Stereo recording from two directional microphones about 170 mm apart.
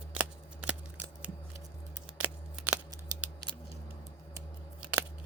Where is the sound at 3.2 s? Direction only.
5° right (ahead or behind).